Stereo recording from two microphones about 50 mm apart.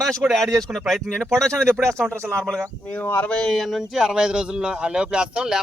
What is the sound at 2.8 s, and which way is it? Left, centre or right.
Speech, left.